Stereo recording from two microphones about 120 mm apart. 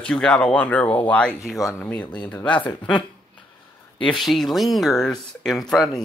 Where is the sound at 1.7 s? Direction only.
10° left (ahead or behind).